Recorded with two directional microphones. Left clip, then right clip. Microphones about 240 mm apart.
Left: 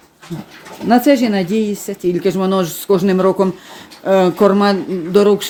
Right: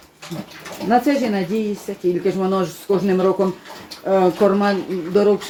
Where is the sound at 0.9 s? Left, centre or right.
Left.